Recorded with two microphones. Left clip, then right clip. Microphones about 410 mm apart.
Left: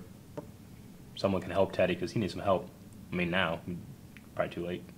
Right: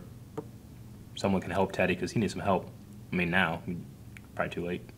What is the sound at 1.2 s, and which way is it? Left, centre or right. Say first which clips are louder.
Speech: even; left.